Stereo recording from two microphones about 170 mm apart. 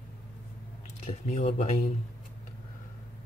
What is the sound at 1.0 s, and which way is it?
Speech, 40° left (ahead or behind).